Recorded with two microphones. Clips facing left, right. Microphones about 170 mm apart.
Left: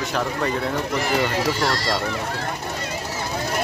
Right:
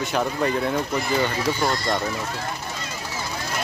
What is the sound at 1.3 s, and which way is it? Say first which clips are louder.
Speech: left 1 dB; 85° left.